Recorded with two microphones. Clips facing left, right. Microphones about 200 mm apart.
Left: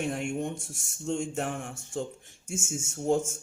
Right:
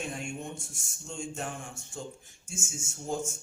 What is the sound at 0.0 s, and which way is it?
Speech, 65° left (ahead or behind).